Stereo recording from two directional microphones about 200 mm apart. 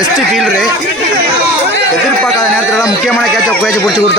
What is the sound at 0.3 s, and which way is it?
Speech, centre (ahead or behind).